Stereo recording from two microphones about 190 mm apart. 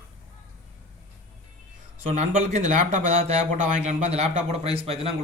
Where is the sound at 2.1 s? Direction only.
40° right (ahead or behind).